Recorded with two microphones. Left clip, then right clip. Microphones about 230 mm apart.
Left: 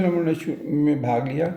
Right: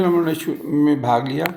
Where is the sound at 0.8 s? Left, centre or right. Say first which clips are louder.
Right 5 dB; right.